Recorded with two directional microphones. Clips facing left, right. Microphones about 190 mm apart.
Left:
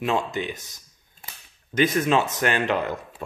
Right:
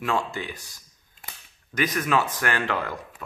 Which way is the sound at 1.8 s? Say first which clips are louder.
Left 4 dB; 25° left (ahead or behind).